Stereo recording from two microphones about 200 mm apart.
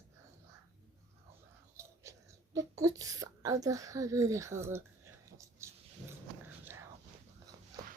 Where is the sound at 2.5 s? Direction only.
15° right (ahead or behind).